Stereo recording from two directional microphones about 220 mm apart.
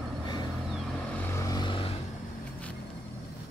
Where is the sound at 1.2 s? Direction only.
15° left (ahead or behind).